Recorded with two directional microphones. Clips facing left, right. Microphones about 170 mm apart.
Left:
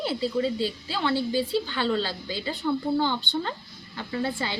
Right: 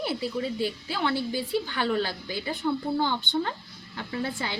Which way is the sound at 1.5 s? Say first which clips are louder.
Left 1 dB; 15° right (ahead or behind).